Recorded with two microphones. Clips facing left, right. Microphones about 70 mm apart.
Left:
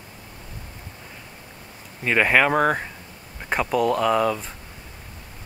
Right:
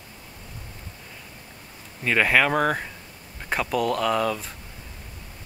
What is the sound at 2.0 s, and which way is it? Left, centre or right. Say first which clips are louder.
Speech: left 2 dB; centre.